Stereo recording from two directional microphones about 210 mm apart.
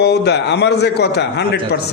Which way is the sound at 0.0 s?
50° left (ahead or behind).